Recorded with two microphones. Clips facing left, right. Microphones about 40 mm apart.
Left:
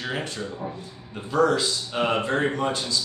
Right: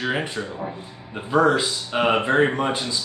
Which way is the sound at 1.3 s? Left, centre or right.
Right.